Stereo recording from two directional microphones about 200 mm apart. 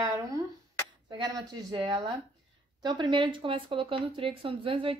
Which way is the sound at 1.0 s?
20° right (ahead or behind).